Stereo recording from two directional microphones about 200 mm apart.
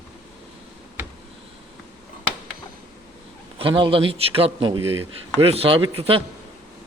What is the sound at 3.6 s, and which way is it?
Speech, 25° right (ahead or behind).